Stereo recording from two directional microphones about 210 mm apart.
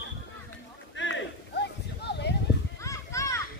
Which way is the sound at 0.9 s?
55° left (ahead or behind).